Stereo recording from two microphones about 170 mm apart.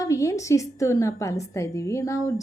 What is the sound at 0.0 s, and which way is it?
Speech, 20° left (ahead or behind).